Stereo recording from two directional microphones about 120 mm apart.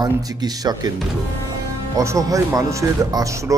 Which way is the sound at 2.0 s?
30° right (ahead or behind).